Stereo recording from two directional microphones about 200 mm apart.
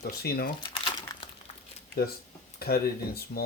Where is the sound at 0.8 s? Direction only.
25° left (ahead or behind).